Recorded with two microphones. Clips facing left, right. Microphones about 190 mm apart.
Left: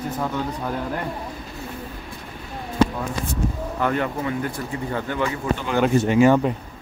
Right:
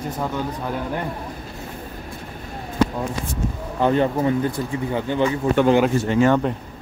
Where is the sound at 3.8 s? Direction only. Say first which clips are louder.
Right 5 dB; 25° right (ahead or behind).